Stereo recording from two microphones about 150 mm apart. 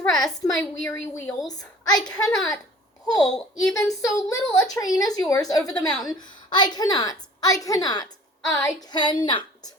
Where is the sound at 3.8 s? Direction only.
20° left (ahead or behind).